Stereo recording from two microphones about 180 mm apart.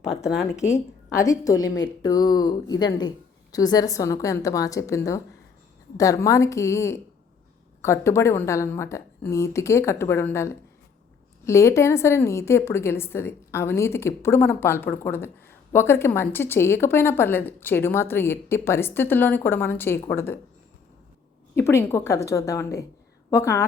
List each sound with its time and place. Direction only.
0.3 s speech: 5° right (ahead or behind)
0.6 s a woman's voice: 15° left (ahead or behind)
21.5 s a woman's voice: 15° left (ahead or behind)